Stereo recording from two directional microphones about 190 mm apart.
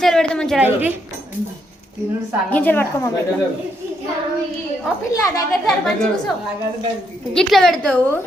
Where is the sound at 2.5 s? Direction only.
10° left (ahead or behind).